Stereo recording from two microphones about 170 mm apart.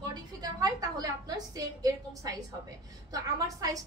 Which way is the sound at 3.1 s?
20° right (ahead or behind).